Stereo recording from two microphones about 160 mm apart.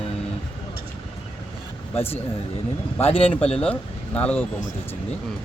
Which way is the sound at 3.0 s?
35° left (ahead or behind).